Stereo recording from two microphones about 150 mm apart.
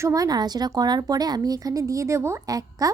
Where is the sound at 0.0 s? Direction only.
20° right (ahead or behind).